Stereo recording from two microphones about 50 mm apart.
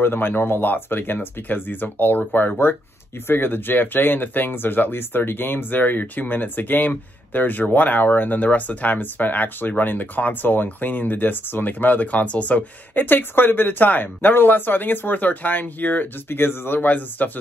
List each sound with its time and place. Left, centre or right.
0.0 s speech: left
16.3 s speech: left
16.8 s speech: left